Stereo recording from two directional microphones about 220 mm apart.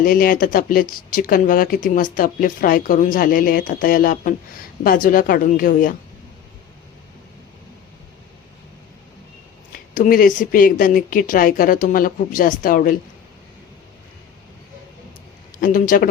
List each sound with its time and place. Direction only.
0.0 s speech: 40° left (ahead or behind)
9.9 s speech: 40° left (ahead or behind)
15.6 s speech: 40° left (ahead or behind)